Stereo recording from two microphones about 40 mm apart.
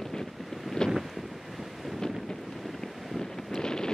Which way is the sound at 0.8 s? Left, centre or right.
Centre.